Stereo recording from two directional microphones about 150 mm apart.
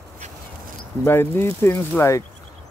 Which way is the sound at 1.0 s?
15° left (ahead or behind).